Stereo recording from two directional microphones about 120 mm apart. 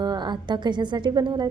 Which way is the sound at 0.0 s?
35° right (ahead or behind).